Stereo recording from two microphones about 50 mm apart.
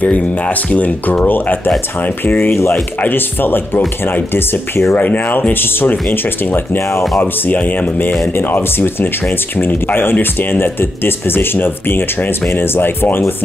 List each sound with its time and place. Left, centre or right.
0.0 s speech: left
4.9 s speech: left